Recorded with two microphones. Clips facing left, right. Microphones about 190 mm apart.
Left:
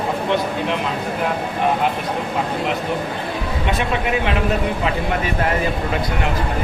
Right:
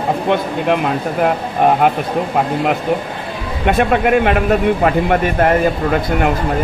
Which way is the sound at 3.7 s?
55° right (ahead or behind).